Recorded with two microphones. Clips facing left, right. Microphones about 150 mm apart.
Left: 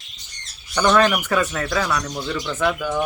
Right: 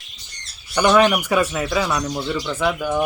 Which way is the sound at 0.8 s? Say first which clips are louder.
Right 2 dB; 10° right (ahead or behind).